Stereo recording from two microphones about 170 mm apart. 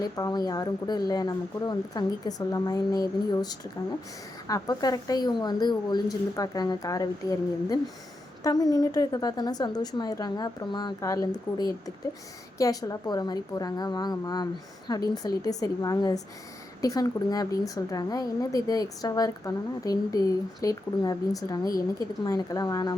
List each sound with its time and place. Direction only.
0.0 s speech: 25° left (ahead or behind)